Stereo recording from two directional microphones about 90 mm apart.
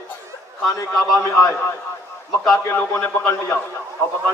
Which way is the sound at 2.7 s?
25° left (ahead or behind).